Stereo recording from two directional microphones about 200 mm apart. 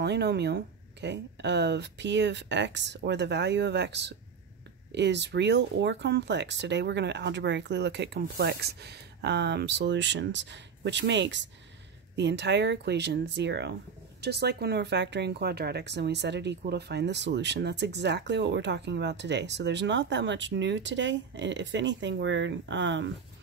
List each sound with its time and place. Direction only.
0.0 s speech: 55° right (ahead or behind)